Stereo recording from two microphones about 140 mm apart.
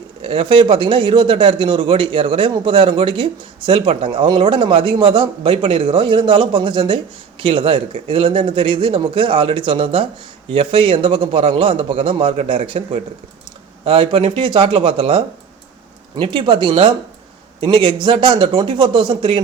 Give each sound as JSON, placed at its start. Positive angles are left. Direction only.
{"t": 0.2, "sound": "a man's voice", "side_deg": -40}